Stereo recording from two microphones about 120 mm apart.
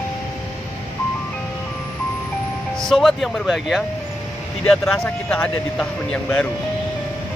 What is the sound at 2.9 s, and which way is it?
Speech, centre (ahead or behind).